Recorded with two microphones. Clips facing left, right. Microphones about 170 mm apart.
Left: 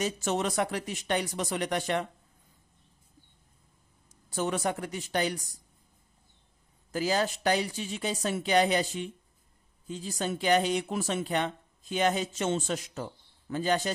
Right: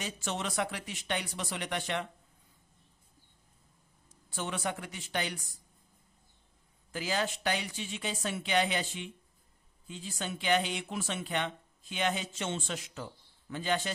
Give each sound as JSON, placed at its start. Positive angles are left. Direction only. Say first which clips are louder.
{"t": 0.0, "sound": "speech", "louder": "left 7 dB", "side_deg": 45}
{"t": 4.1, "sound": "speech", "louder": "left 7 dB", "side_deg": 40}
{"t": 6.9, "sound": "speech", "louder": "left 5 dB", "side_deg": 40}